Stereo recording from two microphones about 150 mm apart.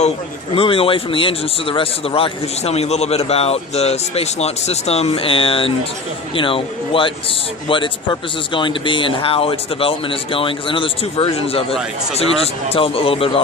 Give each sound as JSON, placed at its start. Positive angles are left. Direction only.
{"t": 0.5, "sound": "speech", "side_deg": 40}